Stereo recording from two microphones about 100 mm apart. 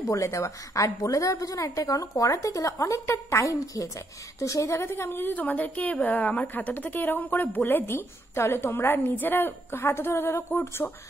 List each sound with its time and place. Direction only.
0.1 s a woman's voice: 30° left (ahead or behind)